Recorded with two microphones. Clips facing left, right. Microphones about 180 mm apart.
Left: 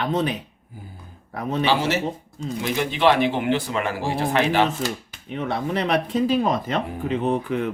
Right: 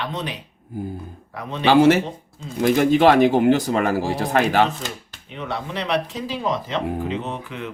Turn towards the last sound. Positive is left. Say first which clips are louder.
# left 8 dB
turn(degrees=50)  # may be behind; listen again after turning